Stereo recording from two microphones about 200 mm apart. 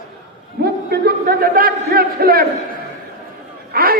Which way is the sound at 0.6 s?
50° right (ahead or behind).